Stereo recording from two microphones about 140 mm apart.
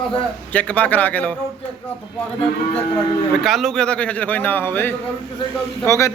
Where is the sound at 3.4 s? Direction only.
Centre (ahead or behind); by 6.1 s 20° left (ahead or behind).